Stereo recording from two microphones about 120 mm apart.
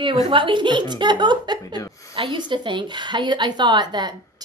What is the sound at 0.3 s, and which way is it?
Speech, 45° right (ahead or behind).